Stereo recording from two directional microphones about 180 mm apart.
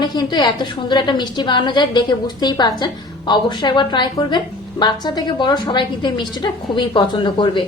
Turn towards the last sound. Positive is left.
turn(degrees=25)  # may be behind; listen again after turning